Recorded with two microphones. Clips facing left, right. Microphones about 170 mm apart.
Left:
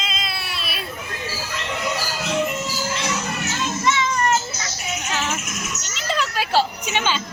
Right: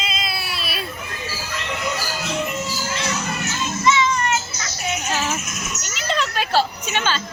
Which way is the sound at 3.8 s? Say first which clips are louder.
Right 3 dB; 50° left (ahead or behind).